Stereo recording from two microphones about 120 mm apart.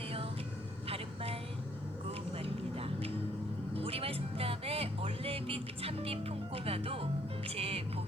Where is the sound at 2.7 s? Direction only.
55° right (ahead or behind).